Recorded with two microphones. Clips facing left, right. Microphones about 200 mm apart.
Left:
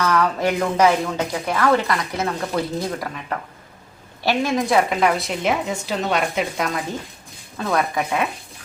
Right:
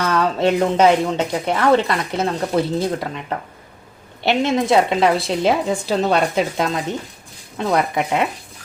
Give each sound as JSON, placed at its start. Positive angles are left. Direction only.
{"t": 0.0, "sound": "speech", "side_deg": -25}